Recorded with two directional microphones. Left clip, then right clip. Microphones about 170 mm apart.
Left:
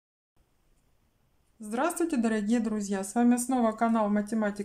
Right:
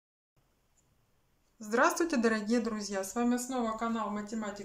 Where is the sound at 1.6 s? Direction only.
20° left (ahead or behind).